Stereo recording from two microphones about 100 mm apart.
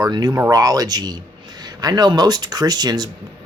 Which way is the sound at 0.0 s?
40° right (ahead or behind).